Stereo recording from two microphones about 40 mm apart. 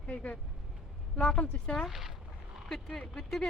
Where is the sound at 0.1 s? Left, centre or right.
Left.